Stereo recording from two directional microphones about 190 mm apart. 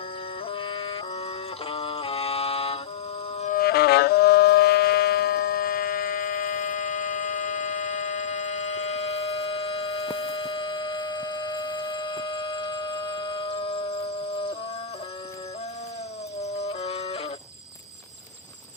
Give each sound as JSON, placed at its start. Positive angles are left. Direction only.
{"t": 0.5, "sound": "music", "side_deg": 25}
{"t": 3.4, "sound": "music", "side_deg": 50}
{"t": 16.4, "sound": "music", "side_deg": 35}